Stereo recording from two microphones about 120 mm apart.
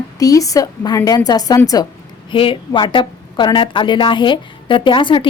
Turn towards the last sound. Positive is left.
turn(degrees=45)  # may be behind; listen again after turning